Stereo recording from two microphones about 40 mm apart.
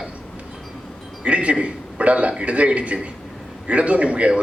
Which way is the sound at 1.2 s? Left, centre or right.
Right.